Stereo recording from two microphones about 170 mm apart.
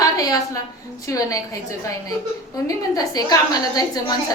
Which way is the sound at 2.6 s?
20° left (ahead or behind).